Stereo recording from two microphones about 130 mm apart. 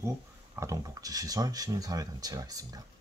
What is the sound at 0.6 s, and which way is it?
Speech, 25° right (ahead or behind).